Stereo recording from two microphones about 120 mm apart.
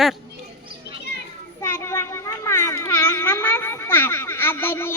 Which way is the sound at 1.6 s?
20° left (ahead or behind).